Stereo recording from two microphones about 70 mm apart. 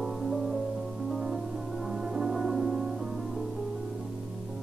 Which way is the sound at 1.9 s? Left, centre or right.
Centre.